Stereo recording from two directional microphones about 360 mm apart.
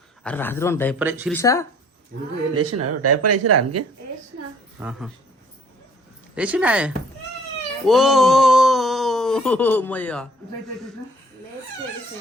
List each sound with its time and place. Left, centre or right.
0.2 s a man's voice: centre
1.0 s speech: centre
1.3 s speech: centre
2.6 s speech: right
4.8 s a man's voice: centre
6.3 s a man's voice: centre